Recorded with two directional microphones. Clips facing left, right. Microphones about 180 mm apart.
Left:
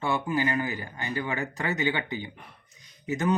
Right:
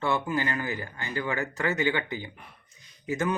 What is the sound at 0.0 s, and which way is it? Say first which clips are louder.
Speech: left 1 dB; 15° left (ahead or behind).